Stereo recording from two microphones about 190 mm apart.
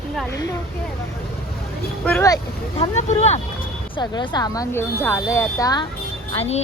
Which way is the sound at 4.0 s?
20° left (ahead or behind).